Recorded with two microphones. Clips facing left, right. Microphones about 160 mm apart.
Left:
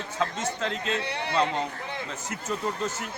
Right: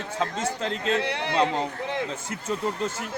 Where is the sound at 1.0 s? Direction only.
90° right.